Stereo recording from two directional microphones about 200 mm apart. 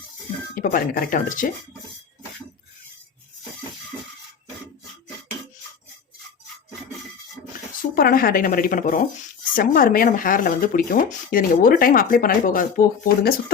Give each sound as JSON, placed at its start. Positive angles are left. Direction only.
{"t": 0.5, "sound": "speech", "side_deg": 45}
{"t": 7.8, "sound": "speech", "side_deg": 45}